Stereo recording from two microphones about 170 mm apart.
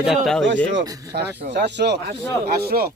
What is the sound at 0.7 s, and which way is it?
Speech, 90° right.